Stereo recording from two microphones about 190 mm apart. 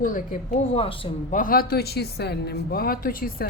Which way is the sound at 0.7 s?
30° left (ahead or behind).